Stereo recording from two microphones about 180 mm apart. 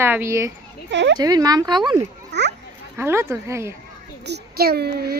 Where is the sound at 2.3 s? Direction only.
70° right (ahead or behind).